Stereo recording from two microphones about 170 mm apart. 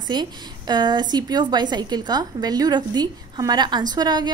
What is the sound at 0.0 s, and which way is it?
A woman's voice, 25° right (ahead or behind).